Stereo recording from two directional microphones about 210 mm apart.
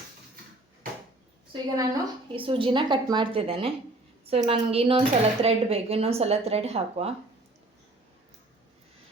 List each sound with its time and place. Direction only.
1.7 s speech: 15° right (ahead or behind)